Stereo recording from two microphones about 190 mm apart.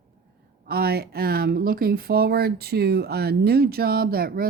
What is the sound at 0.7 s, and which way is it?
Speech, 55° right (ahead or behind).